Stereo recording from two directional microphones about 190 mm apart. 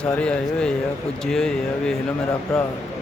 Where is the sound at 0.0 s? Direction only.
5° left (ahead or behind).